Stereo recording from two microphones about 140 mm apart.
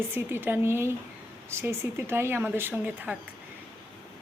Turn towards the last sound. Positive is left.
turn(degrees=-10)  # may be behind; listen again after turning